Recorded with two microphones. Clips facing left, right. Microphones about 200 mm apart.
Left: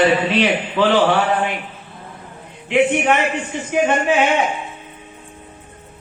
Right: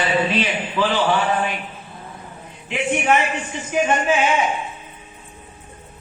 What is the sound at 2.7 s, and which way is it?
A man's voice, 65° left (ahead or behind).